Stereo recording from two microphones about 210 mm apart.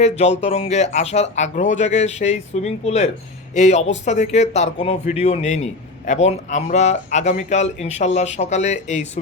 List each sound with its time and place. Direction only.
0.0 s speech: 30° left (ahead or behind)